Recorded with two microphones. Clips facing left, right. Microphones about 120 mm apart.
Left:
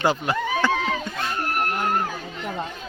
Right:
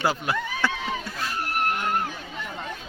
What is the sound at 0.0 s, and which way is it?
Speech, 10° right (ahead or behind).